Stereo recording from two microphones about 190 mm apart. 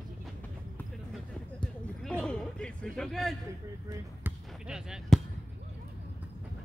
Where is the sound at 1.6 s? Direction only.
5° left (ahead or behind).